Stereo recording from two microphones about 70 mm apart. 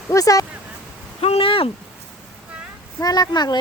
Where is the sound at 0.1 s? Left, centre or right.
Left.